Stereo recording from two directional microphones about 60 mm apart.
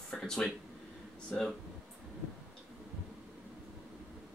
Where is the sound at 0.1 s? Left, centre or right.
Centre.